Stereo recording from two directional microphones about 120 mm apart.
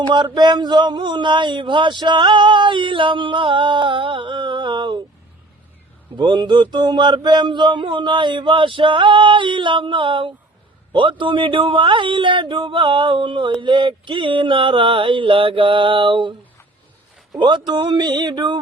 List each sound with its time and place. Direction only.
0.1 s speech: 40° right (ahead or behind)
6.1 s speech: 40° right (ahead or behind)
17.7 s speech: 35° right (ahead or behind)